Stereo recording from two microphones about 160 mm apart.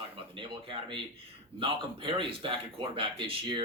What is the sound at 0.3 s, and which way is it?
Speech, 30° right (ahead or behind).